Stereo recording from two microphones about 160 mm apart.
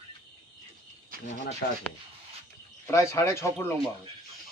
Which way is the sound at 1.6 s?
75° left (ahead or behind).